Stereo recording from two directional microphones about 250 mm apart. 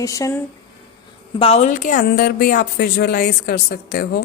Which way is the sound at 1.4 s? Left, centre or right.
Left.